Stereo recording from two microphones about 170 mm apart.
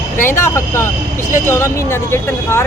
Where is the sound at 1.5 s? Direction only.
15° left (ahead or behind).